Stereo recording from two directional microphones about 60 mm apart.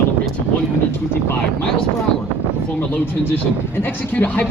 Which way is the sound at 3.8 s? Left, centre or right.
Left.